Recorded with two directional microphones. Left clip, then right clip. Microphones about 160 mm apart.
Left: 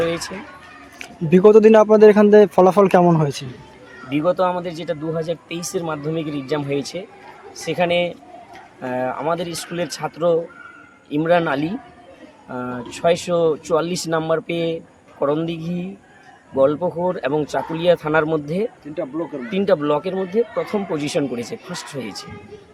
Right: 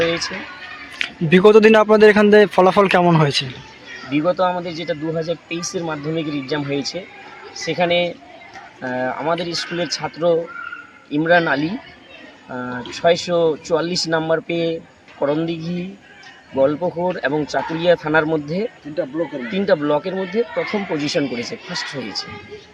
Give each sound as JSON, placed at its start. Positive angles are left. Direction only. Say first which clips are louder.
{"t": 0.9, "sound": "speech", "louder": "right 2 dB", "side_deg": 5}
{"t": 18.9, "sound": "speech", "louder": "right 4 dB", "side_deg": -35}
{"t": 19.5, "sound": "speech", "louder": "even", "side_deg": 10}